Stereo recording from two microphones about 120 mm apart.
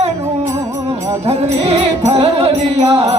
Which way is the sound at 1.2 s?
55° right (ahead or behind).